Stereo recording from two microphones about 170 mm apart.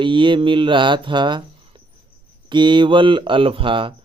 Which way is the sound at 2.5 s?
25° right (ahead or behind).